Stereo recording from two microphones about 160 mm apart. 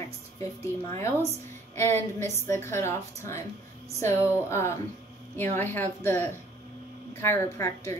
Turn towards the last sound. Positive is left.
turn(degrees=15)  # may be behind; listen again after turning